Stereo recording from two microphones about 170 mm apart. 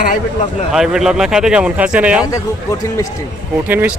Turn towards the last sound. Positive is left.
turn(degrees=-10)  # may be behind; listen again after turning